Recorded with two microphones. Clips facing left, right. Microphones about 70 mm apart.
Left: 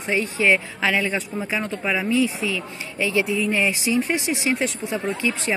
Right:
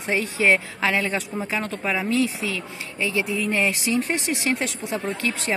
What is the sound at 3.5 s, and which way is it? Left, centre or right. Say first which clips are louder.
A woman's voice: right 1 dB; centre.